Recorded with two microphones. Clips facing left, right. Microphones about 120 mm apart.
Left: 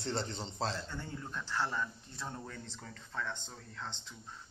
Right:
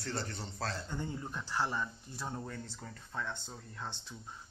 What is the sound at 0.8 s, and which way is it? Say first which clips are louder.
Speech: right 3 dB; 15° right (ahead or behind).